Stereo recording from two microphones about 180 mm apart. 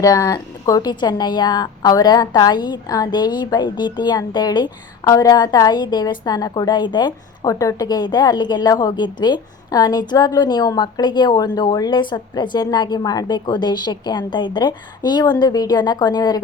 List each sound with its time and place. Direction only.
0.0 s a woman's voice: 20° left (ahead or behind)